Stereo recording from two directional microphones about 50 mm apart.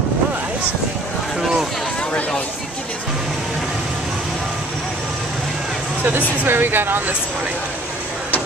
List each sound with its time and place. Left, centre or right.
6.4 s speech: right